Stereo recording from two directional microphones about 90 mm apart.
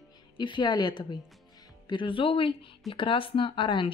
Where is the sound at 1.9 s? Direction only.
65° left (ahead or behind).